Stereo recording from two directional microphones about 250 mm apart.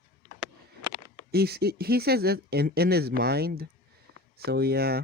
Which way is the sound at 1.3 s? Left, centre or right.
Right.